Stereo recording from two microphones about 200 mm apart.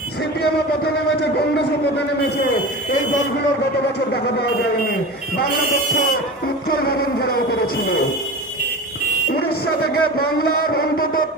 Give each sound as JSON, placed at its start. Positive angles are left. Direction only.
{"t": 6.7, "sound": "music", "side_deg": 50}
{"t": 9.3, "sound": "speech", "side_deg": 50}